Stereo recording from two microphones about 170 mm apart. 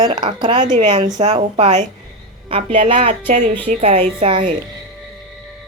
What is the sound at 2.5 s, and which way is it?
Speech, 30° right (ahead or behind).